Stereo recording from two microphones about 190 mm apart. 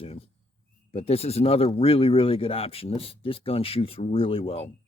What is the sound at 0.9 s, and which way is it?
Speech, 30° left (ahead or behind).